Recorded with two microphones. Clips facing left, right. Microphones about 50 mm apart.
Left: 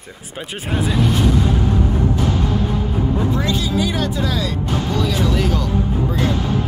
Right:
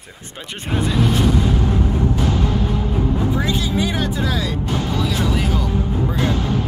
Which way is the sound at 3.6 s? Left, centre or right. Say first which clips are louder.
Left 1 dB; right.